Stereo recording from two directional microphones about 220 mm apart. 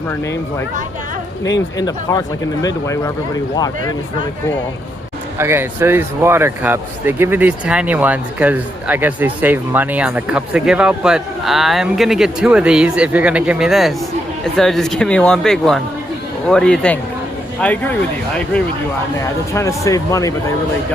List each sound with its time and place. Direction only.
1.8 s speech: 15° left (ahead or behind)
5.4 s speech: 10° right (ahead or behind); by 17.9 s 5° left (ahead or behind)
19.2 s speech: 15° left (ahead or behind)